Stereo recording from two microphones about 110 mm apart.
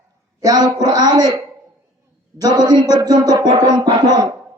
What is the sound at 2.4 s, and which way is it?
A woman's voice, 40° right (ahead or behind).